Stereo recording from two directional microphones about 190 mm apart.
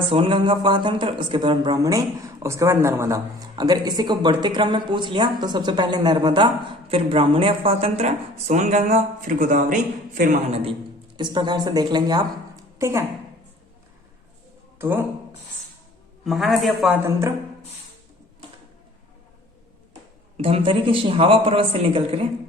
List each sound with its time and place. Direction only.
0.1 s speech: 25° right (ahead or behind); by 9.7 s 45° right (ahead or behind)
10.5 s a woman's voice: 30° right (ahead or behind)
14.8 s speech: 10° right (ahead or behind)
16.2 s a man's voice: centre (ahead or behind)
17.1 s speech: 15° right (ahead or behind)
20.3 s speech: 30° right (ahead or behind)